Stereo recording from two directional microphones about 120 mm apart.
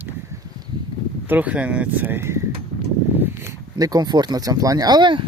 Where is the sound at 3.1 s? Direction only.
20° right (ahead or behind).